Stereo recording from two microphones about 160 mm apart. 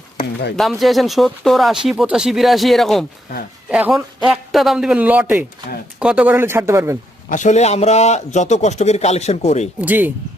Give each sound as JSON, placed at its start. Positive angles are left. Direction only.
{"t": 0.5, "sound": "speech", "side_deg": 0}
{"t": 3.7, "sound": "a man's voice", "side_deg": -10}
{"t": 7.3, "sound": "a man's voice", "side_deg": 50}
{"t": 9.8, "sound": "a man's voice", "side_deg": -10}